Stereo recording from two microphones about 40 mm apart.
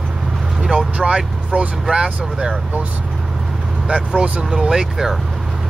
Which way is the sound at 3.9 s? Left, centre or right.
Right.